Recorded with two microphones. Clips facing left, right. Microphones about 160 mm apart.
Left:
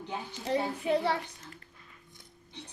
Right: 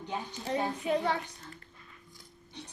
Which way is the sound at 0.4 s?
35° left (ahead or behind).